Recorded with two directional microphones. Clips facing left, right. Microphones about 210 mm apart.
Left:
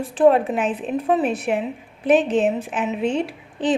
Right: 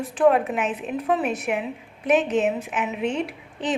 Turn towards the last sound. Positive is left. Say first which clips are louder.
# left 5 dB
turn(degrees=30)  # may be behind; listen again after turning